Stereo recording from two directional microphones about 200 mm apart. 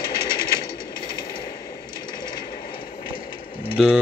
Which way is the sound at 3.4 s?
45° left (ahead or behind).